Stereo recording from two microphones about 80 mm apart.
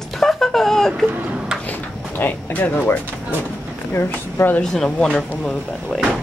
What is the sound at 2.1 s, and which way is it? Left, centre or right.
Speech, left.